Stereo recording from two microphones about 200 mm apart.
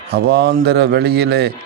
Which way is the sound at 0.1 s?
50° right (ahead or behind).